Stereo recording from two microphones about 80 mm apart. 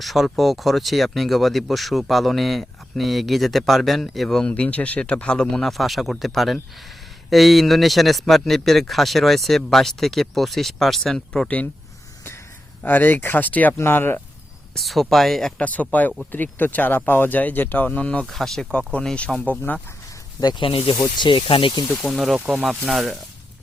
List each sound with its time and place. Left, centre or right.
0.0 s speech: centre
12.8 s speech: left
14.8 s speech: centre
15.6 s speech: centre
18.3 s speech: centre
20.4 s speech: left
22.0 s speech: centre